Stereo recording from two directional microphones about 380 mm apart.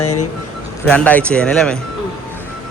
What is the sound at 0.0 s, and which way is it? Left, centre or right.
Speech, left.